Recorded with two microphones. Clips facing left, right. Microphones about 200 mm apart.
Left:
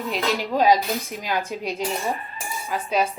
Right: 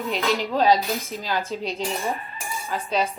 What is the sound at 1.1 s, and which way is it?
Speech, 15° left (ahead or behind).